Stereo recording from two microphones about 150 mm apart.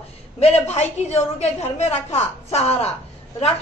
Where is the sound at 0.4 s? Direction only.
45° left (ahead or behind).